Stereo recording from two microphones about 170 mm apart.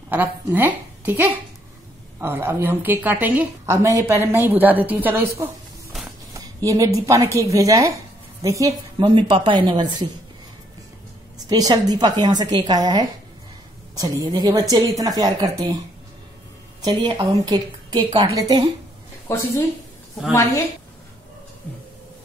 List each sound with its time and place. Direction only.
0.1 s a woman's voice: 10° right (ahead or behind)
11.3 s a woman's voice: 20° right (ahead or behind)
16.8 s a woman's voice: 30° right (ahead or behind)
19.3 s a woman's voice: 15° left (ahead or behind)